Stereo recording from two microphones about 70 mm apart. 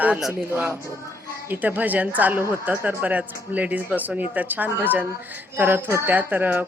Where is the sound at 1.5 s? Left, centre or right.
Right.